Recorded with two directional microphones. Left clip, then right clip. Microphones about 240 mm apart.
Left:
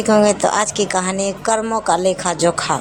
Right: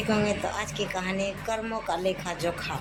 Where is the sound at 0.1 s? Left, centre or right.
Left.